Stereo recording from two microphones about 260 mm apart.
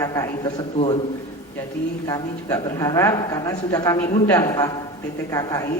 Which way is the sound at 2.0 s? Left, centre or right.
Centre.